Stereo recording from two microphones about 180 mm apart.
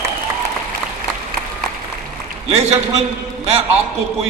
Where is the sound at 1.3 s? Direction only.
55° right (ahead or behind).